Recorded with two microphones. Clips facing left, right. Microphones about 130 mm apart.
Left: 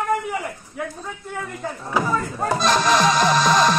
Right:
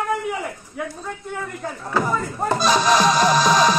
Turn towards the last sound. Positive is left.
turn(degrees=0)  # may be behind; listen again after turning